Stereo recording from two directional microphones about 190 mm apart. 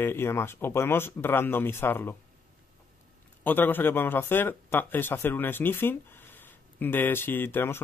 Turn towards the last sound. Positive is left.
turn(degrees=10)  # may be behind; listen again after turning